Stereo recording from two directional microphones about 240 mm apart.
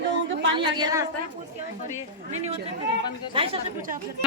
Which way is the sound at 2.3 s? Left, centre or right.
Right.